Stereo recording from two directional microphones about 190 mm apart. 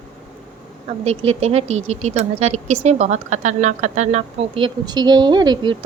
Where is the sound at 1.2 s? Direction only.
35° right (ahead or behind).